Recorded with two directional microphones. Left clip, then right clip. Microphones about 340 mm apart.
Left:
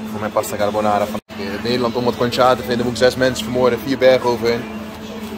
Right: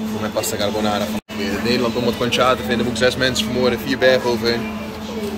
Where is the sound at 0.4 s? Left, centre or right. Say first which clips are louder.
Left 3 dB; centre.